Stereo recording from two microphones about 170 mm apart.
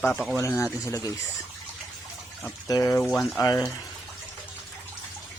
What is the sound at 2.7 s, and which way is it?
Speech, 20° left (ahead or behind).